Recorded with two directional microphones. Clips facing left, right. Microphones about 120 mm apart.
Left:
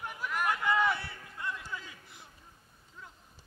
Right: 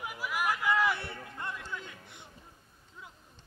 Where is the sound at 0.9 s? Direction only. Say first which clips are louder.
Right 2 dB; 60° right (ahead or behind).